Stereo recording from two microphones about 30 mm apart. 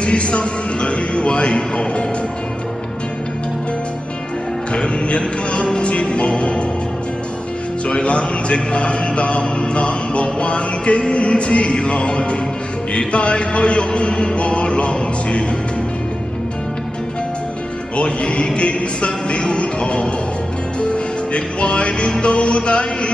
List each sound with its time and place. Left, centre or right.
0.0 s a man's voice: left
4.7 s a man's voice: left
7.8 s a man's voice: left
17.9 s a man's voice: left
20.8 s music: left